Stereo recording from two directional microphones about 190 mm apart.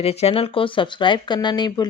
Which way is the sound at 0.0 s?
30° left (ahead or behind).